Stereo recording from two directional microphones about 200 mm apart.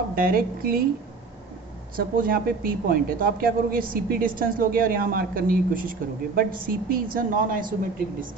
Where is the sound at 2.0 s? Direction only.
45° right (ahead or behind).